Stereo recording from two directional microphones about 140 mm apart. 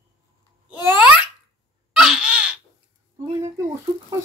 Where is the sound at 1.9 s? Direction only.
5° right (ahead or behind).